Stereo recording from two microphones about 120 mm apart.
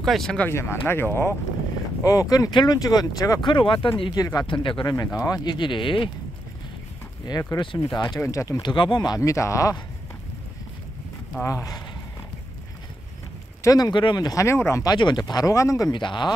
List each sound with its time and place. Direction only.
0.0 s speech: centre (ahead or behind)
0.5 s speech: 20° left (ahead or behind); by 3.9 s 45° left (ahead or behind)
4.0 s speech: 35° left (ahead or behind)
4.5 s speech: 45° left (ahead or behind)
4.9 s speech: 30° left (ahead or behind); by 6.0 s 45° left (ahead or behind)
7.5 s speech: 40° left (ahead or behind)
8.7 s speech: 40° left (ahead or behind)
11.4 s speech: 30° left (ahead or behind)
13.6 s speech: 30° left (ahead or behind)
15.0 s speech: 35° left (ahead or behind)
15.9 s speech: 40° left (ahead or behind)